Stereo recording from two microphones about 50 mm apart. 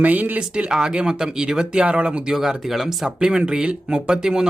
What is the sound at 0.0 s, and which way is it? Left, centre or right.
Speech, right.